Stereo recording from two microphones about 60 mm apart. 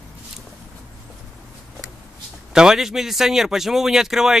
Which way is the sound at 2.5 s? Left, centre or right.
Centre.